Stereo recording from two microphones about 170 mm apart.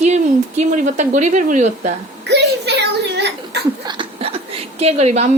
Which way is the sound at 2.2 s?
80° right.